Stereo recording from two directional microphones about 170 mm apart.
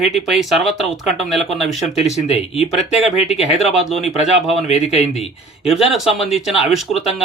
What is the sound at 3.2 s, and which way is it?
Speech, 35° left (ahead or behind).